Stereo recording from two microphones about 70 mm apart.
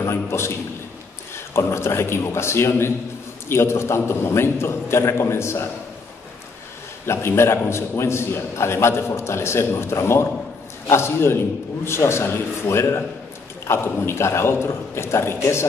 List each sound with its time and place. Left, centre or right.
0.0 s a man's voice: left
7.1 s a man's voice: left